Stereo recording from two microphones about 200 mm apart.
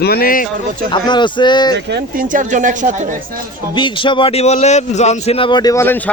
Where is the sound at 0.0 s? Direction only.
50° left (ahead or behind).